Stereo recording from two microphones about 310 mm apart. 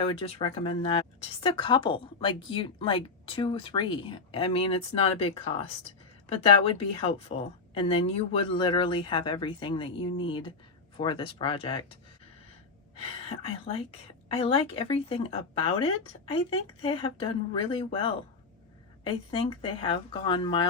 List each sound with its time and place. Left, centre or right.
0.0 s speech: centre
13.2 s a woman's voice: centre
19.3 s speech: centre